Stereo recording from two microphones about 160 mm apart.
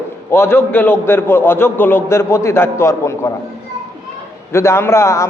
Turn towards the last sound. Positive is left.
turn(degrees=15)  # may be behind; listen again after turning